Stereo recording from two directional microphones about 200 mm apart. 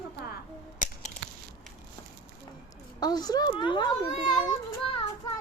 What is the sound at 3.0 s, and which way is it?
Speech, 20° left (ahead or behind).